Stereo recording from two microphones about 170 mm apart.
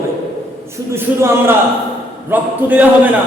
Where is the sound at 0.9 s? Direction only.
15° right (ahead or behind).